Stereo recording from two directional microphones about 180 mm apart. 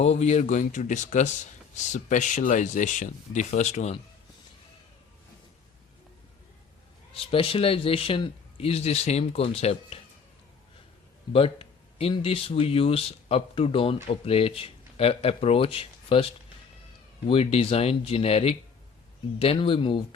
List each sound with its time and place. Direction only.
0.0 s speech: 35° left (ahead or behind)
7.1 s a man's voice: 30° left (ahead or behind)
11.3 s a man's voice: 30° left (ahead or behind)